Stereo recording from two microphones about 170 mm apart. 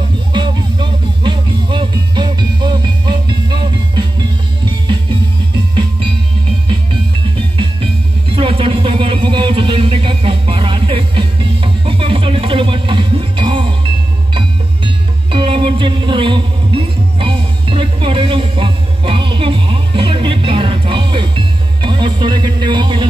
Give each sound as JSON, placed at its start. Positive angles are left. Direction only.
{"t": 0.3, "sound": "music", "side_deg": -30}
{"t": 8.4, "sound": "music", "side_deg": -30}
{"t": 15.3, "sound": "music", "side_deg": -30}